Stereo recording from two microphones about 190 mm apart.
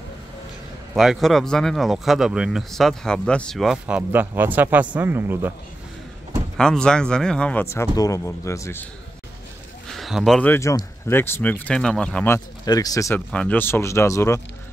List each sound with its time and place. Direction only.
0.9 s speech: centre (ahead or behind)
6.5 s speech: 5° left (ahead or behind)
9.8 s speech: centre (ahead or behind)
12.6 s speech: 20° left (ahead or behind)
13.3 s speech: 5° left (ahead or behind)